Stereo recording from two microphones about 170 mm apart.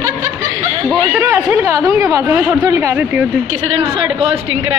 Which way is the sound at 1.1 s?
15° right (ahead or behind).